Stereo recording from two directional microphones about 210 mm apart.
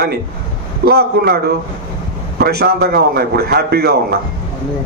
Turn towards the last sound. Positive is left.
turn(degrees=-50)  # may be behind; listen again after turning